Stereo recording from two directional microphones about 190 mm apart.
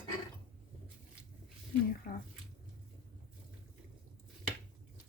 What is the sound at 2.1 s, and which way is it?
Speech, 50° left (ahead or behind).